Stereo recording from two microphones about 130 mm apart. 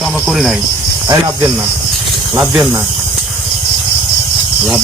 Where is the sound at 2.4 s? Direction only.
10° right (ahead or behind).